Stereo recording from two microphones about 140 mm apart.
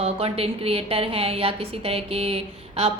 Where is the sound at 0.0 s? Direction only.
45° right (ahead or behind).